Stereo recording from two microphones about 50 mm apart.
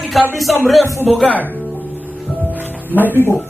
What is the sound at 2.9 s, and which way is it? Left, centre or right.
Speech, right.